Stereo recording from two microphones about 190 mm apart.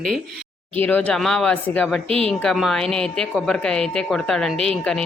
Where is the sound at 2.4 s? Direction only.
Centre (ahead or behind).